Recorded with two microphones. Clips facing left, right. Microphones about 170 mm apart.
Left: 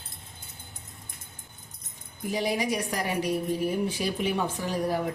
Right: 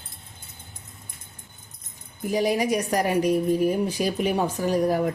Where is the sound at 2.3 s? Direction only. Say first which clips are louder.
Right 5 dB; 45° right (ahead or behind).